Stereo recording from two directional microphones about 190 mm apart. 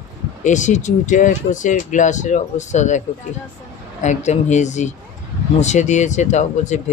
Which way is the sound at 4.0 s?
40° left (ahead or behind).